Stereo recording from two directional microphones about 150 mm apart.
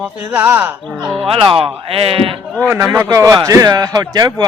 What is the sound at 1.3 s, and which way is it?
Speech, 35° right (ahead or behind).